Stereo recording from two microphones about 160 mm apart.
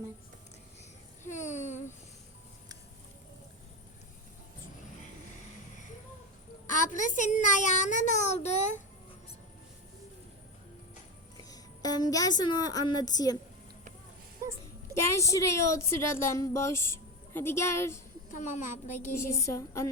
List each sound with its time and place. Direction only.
1.3 s speech: 50° left (ahead or behind)
6.7 s a child's voice: 55° left (ahead or behind)
11.5 s a woman's voice: 25° left (ahead or behind)
14.9 s speech: 20° left (ahead or behind)
18.3 s a child's voice: 50° left (ahead or behind)
19.1 s a woman's voice: 20° left (ahead or behind)